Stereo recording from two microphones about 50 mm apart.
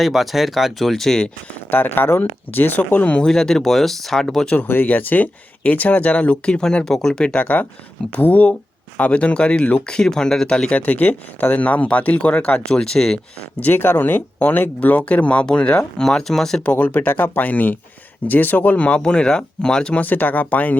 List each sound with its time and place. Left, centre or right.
0.0 s speech: centre
1.7 s speech: left
2.5 s speech: left
3.1 s speech: left
3.3 s speech: centre
4.4 s speech: left
4.7 s speech: left; by 7.3 s centre
7.3 s speech: left
9.0 s speech: left
10.7 s speech: left
12.6 s speech: centre
13.6 s speech: left; by 16.6 s centre
16.6 s speech: left; by 20.0 s centre
20.0 s speech: left